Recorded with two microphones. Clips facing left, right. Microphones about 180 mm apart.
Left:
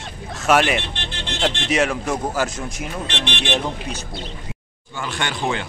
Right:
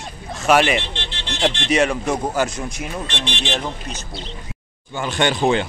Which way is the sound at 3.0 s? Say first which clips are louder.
Left 4 dB; 60° left (ahead or behind).